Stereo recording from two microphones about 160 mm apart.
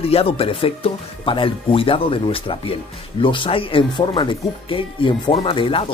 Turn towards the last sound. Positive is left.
turn(degrees=35)  # may be behind; listen again after turning